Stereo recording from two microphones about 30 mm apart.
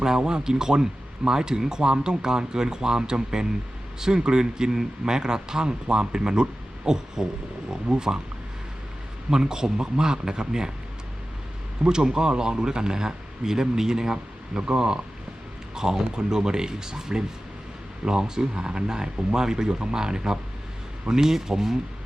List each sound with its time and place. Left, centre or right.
0.0 s speech: right
9.3 s speech: right
11.9 s a man's voice: right